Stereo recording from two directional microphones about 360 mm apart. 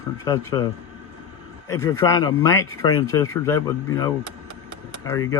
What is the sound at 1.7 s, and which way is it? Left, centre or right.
Speech, centre.